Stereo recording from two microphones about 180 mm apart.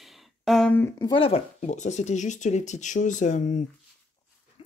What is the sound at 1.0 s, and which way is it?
Speech, 30° left (ahead or behind).